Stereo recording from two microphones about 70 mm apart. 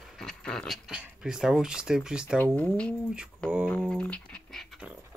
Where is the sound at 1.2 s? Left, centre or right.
Centre.